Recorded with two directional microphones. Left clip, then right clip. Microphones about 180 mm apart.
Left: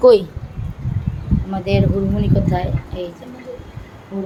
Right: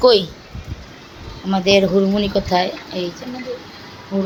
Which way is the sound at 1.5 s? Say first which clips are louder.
Right 7 dB; 20° right (ahead or behind).